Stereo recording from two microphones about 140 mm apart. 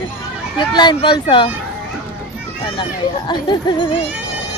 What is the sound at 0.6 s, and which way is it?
Speech, 30° left (ahead or behind).